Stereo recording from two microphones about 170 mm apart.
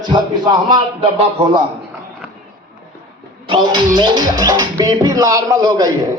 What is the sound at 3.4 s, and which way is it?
Speech, 30° right (ahead or behind).